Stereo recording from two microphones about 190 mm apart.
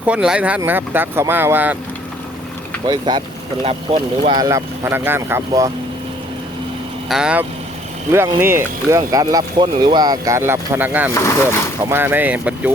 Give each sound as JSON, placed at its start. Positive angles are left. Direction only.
{"t": 0.1, "sound": "speech", "side_deg": -5}
{"t": 2.8, "sound": "speech", "side_deg": -25}
{"t": 4.4, "sound": "speech", "side_deg": -15}
{"t": 7.1, "sound": "speech", "side_deg": -5}
{"t": 11.1, "sound": "speech", "side_deg": 15}
{"t": 11.8, "sound": "speech", "side_deg": -10}